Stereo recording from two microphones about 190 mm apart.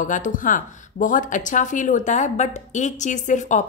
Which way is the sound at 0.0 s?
45° left (ahead or behind).